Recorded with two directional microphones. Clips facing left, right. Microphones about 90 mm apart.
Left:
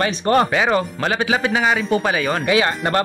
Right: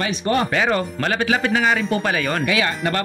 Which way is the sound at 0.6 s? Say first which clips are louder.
Left 2 dB; 20° left (ahead or behind).